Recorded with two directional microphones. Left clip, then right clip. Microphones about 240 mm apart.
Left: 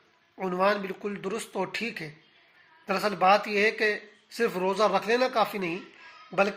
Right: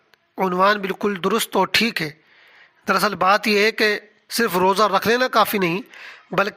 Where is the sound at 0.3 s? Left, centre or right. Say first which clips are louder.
Right 8 dB; right.